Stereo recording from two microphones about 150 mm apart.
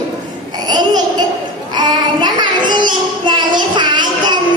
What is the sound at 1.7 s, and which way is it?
Child singing, 30° right (ahead or behind).